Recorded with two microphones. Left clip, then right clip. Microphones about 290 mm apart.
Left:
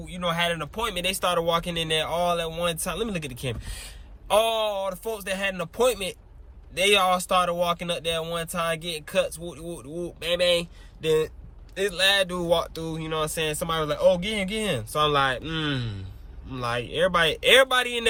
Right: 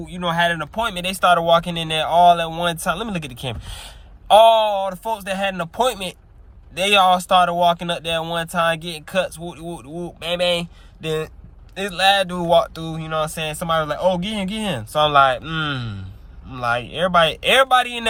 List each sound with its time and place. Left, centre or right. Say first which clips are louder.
0.0 s speech: right 6 dB; centre